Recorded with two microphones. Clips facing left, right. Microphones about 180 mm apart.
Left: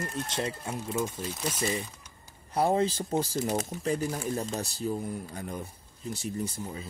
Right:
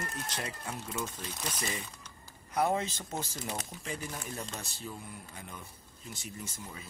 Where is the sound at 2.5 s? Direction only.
30° left (ahead or behind).